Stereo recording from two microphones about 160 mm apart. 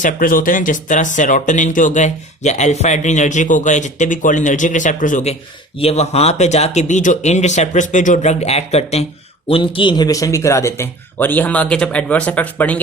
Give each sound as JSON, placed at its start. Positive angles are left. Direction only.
{"t": 0.0, "sound": "speech", "side_deg": 60}